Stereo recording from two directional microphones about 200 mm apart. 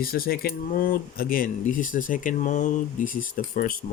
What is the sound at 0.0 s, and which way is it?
Speech, 50° left (ahead or behind).